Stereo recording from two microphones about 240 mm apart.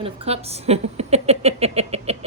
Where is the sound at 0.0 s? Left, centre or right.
Right.